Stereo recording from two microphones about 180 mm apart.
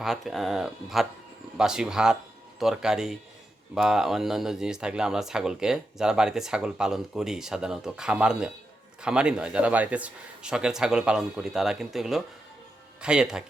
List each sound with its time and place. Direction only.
0.0 s speech: centre (ahead or behind)